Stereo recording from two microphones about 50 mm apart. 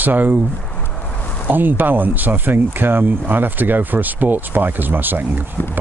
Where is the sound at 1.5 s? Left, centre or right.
Right.